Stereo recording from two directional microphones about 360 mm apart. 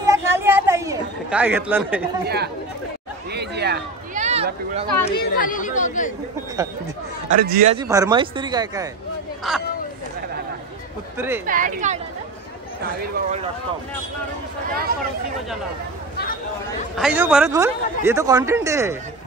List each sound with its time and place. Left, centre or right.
0.0 s a sound: centre
2.2 s speech: right
3.3 s a sound: right
5.0 s speech: left
7.4 s a man's voice: centre
11.1 s speech: centre
11.4 s speech: right
13.1 s speech: centre
16.9 s a man's voice: centre